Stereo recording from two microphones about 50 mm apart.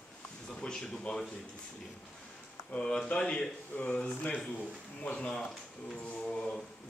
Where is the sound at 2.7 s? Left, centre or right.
Left.